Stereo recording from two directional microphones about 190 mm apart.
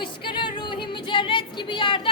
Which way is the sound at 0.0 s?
25° left (ahead or behind).